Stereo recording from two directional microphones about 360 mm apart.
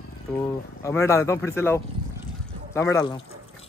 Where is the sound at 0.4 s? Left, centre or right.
Centre.